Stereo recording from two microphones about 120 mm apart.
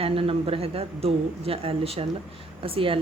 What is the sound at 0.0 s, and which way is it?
Speech, 55° right (ahead or behind).